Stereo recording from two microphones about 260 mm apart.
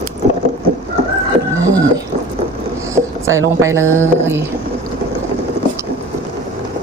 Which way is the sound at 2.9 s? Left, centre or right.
Centre.